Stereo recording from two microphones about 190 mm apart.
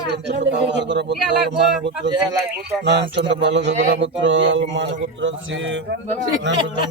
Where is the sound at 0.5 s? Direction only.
65° right (ahead or behind).